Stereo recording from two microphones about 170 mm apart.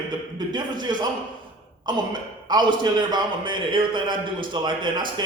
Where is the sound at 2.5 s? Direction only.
25° right (ahead or behind).